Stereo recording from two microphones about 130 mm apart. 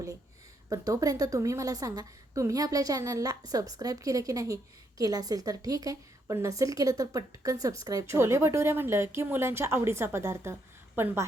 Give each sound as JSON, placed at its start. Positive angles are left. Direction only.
{"t": 0.7, "sound": "a woman's voice", "side_deg": -30}